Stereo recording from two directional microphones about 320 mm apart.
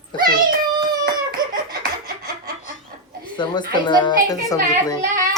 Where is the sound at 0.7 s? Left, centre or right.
Right.